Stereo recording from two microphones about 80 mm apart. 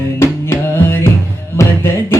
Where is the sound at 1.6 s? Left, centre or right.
Left.